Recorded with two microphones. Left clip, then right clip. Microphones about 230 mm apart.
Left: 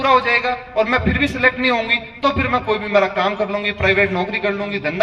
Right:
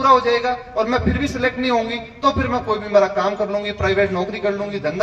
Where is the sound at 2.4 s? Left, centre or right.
Centre.